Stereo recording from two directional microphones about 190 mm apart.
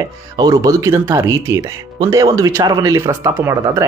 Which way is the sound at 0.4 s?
20° right (ahead or behind).